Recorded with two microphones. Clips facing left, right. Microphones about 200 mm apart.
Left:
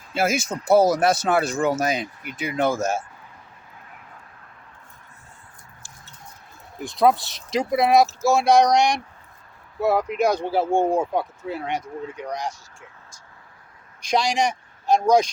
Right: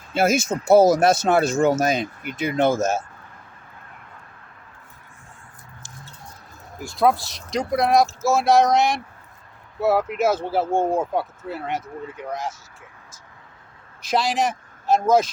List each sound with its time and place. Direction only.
0.1 s speech: 25° right (ahead or behind)
7.0 s speech: centre (ahead or behind)
14.0 s speech: 5° right (ahead or behind)